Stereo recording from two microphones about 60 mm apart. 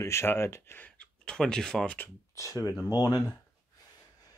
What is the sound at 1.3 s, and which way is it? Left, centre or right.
Speech, centre.